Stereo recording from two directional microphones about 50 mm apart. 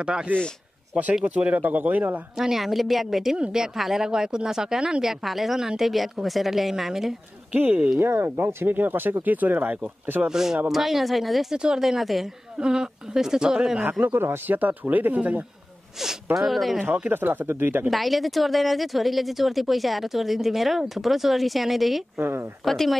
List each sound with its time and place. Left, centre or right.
0.0 s a man's voice: centre
1.2 s speech: right
2.3 s speech: centre
5.2 s speech: centre
7.5 s speech: right
8.0 s speech: right
10.2 s speech: centre
11.5 s speech: centre
12.5 s speech: centre
14.0 s speech: right
16.3 s speech: centre
16.8 s speech: right
17.8 s speech: centre